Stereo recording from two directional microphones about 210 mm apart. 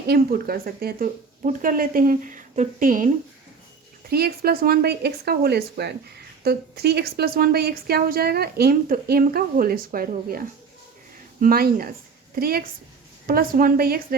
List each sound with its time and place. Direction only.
0.1 s a woman's voice: 45° right (ahead or behind)
4.1 s a woman's voice: 50° right (ahead or behind)